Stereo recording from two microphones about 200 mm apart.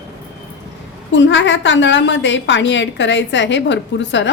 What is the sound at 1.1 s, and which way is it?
A woman's voice, 65° left (ahead or behind).